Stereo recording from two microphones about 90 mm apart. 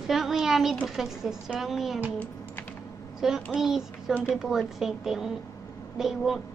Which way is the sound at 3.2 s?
5° right (ahead or behind).